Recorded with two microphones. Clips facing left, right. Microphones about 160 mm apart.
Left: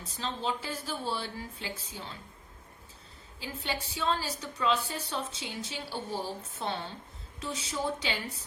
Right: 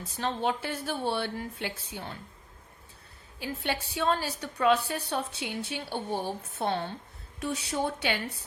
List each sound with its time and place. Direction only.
0.2 s a woman's voice: 60° right (ahead or behind)
3.4 s a woman's voice: 60° right (ahead or behind)